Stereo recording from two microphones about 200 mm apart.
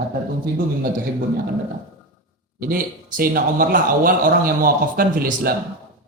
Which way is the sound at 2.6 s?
45° right (ahead or behind).